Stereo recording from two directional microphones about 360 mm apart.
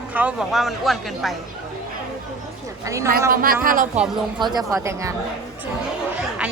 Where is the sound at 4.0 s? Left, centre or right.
Centre.